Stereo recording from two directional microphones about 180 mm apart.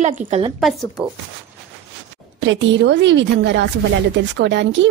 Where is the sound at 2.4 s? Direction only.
85° right.